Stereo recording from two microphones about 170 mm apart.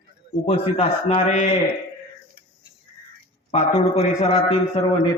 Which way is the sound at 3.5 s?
40° left (ahead or behind).